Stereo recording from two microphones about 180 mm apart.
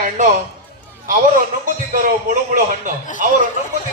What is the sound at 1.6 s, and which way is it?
Speech, 50° right (ahead or behind).